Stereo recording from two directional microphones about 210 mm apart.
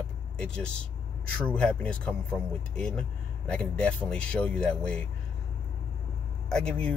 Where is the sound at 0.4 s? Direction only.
5° left (ahead or behind).